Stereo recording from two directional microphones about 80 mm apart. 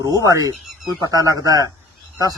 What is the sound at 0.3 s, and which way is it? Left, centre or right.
A man's voice, right.